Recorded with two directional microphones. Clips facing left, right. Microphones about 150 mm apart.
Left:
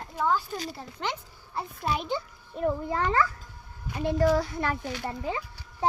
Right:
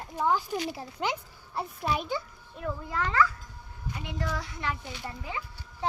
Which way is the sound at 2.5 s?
30° left (ahead or behind).